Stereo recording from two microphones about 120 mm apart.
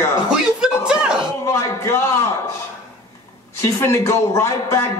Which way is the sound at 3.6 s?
25° left (ahead or behind).